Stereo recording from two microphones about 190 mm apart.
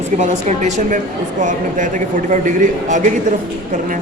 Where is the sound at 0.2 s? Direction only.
40° right (ahead or behind).